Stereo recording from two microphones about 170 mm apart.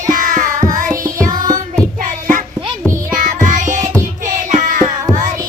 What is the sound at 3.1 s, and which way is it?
Music, 50° right (ahead or behind).